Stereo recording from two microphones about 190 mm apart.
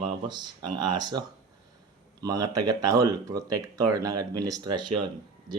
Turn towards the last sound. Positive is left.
turn(degrees=-25)  # may be behind; listen again after turning